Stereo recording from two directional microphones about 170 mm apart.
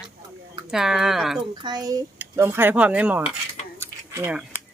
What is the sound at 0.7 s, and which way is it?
Speech, 5° right (ahead or behind).